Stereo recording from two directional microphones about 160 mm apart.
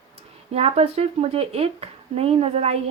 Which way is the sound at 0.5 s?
40° right (ahead or behind).